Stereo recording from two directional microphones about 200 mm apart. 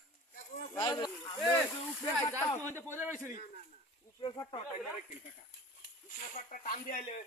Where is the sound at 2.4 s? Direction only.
10° left (ahead or behind).